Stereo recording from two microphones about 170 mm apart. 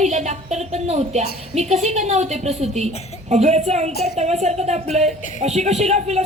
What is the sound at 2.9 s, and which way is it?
Speech, 40° left (ahead or behind).